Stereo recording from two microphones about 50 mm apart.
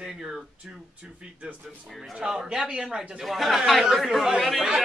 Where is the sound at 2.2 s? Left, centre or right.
Centre.